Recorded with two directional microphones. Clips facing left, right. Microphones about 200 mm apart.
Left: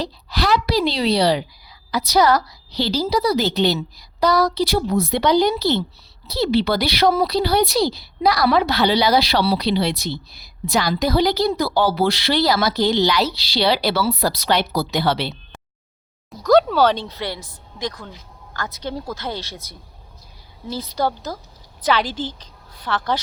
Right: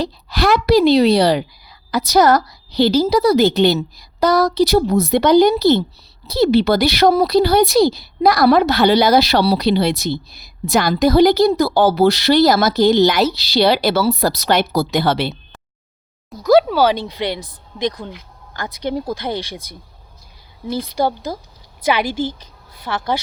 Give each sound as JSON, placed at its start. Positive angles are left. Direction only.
{"t": 0.0, "sound": "speech", "side_deg": -50}
{"t": 16.3, "sound": "speech", "side_deg": -5}
{"t": 20.9, "sound": "a woman's voice", "side_deg": -10}